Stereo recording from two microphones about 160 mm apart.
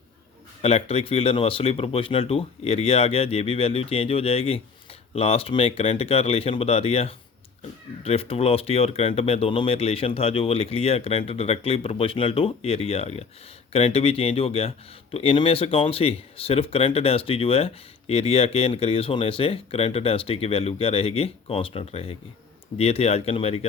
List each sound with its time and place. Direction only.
0.6 s speech: 40° left (ahead or behind)